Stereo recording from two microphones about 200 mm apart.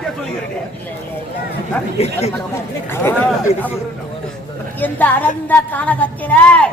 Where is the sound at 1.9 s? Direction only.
30° left (ahead or behind).